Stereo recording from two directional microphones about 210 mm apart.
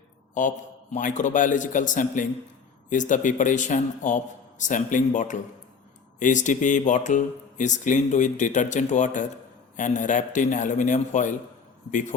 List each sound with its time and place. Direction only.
0.3 s speech: 35° left (ahead or behind)